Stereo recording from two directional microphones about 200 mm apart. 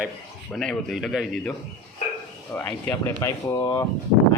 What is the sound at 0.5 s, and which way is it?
A man's voice, centre (ahead or behind).